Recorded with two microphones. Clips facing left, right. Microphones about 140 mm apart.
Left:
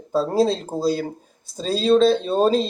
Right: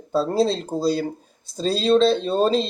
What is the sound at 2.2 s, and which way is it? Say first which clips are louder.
Speech: left 1 dB; 5° left (ahead or behind).